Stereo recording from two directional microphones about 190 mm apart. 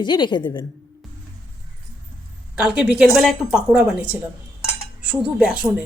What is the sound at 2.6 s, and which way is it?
A woman's voice, 5° right (ahead or behind).